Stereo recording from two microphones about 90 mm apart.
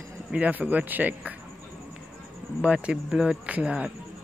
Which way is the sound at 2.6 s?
15° right (ahead or behind).